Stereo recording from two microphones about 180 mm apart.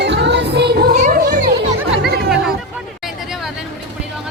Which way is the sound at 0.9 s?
40° right (ahead or behind).